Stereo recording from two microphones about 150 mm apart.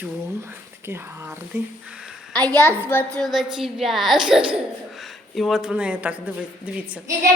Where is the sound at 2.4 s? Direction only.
20° right (ahead or behind).